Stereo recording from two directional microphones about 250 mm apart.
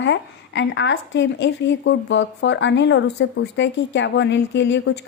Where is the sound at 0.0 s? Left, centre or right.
Left.